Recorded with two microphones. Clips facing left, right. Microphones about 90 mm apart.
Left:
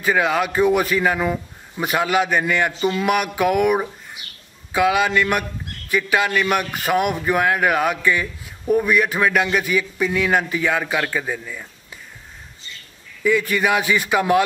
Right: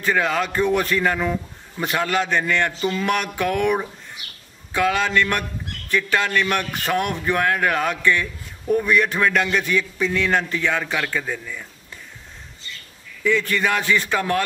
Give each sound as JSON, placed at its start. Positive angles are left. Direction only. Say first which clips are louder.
{"t": 0.0, "sound": "a man's voice", "louder": "left 2 dB", "side_deg": 5}
{"t": 13.2, "sound": "a man's voice", "louder": "left 2 dB", "side_deg": 10}